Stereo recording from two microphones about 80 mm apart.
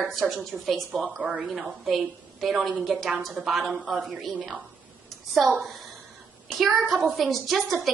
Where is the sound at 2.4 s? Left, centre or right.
Centre.